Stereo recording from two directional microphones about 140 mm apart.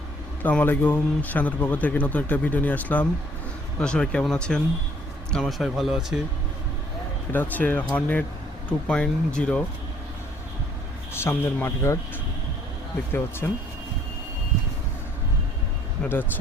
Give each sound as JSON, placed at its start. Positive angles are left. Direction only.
{"t": 0.4, "sound": "speech", "side_deg": 10}
{"t": 7.3, "sound": "speech", "side_deg": 10}
{"t": 11.1, "sound": "speech", "side_deg": 15}
{"t": 13.4, "sound": "speech", "side_deg": 10}